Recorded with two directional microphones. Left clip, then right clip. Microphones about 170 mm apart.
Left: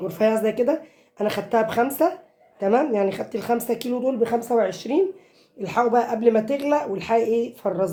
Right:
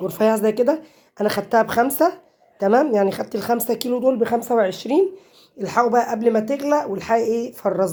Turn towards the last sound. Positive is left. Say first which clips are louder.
# right 2 dB
turn(degrees=-45)  # may be behind; listen again after turning